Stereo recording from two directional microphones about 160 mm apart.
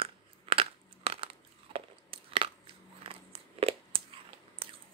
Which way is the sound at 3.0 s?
35° right (ahead or behind).